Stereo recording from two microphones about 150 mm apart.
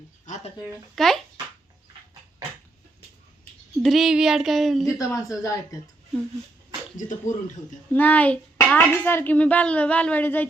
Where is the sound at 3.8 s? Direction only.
Centre (ahead or behind).